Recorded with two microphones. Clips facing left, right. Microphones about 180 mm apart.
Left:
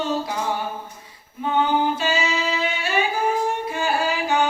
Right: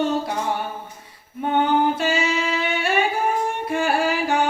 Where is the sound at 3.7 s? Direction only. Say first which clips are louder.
Right 2 dB; 60° right (ahead or behind).